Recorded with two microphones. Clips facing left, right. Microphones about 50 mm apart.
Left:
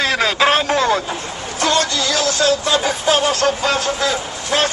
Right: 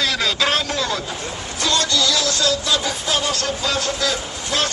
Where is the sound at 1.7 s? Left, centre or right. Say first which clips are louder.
Even; left.